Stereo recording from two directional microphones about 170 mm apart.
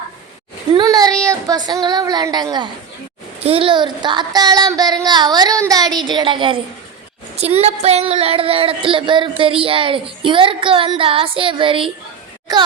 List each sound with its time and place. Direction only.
0.7 s a child's voice: 25° right (ahead or behind)